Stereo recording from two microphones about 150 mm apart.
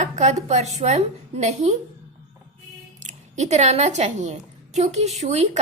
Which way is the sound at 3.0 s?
50° right (ahead or behind).